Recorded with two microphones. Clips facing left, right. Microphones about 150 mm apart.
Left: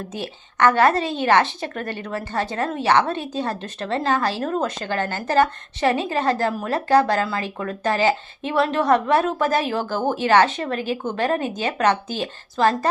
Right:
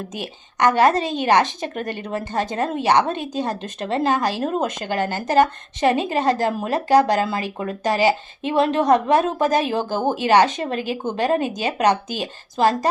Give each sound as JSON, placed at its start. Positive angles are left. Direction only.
{"t": 0.1, "sound": "a woman's voice", "side_deg": -15}